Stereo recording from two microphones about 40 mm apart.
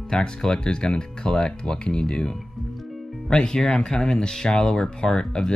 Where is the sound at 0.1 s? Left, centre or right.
Centre.